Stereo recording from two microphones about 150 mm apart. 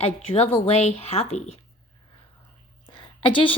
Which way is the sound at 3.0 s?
35° left (ahead or behind).